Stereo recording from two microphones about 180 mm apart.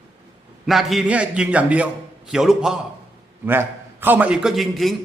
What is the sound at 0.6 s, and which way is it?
A man's voice, centre (ahead or behind).